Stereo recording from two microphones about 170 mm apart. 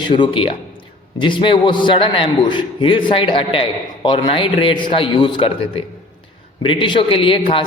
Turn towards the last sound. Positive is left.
turn(degrees=30)  # may be behind; listen again after turning